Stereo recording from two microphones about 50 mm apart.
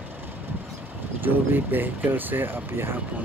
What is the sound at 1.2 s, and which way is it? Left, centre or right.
Speech, right.